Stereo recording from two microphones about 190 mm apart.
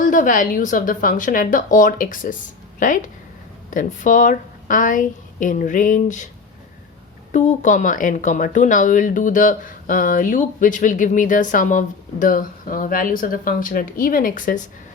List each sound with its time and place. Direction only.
0.0 s a woman's voice: 45° left (ahead or behind)
7.3 s speech: 40° left (ahead or behind)